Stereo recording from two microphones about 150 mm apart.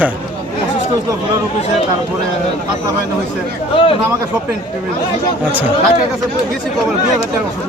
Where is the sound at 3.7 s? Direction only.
35° left (ahead or behind).